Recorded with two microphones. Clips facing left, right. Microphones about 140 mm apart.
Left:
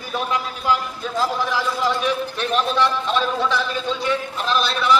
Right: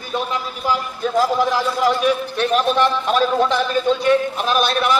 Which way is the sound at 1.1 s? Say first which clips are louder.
Right 5 dB; 15° right (ahead or behind).